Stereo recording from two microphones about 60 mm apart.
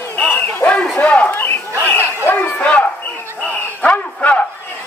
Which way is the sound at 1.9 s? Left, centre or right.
Left.